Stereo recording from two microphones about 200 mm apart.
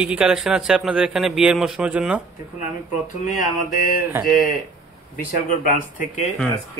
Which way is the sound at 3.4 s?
45° left (ahead or behind).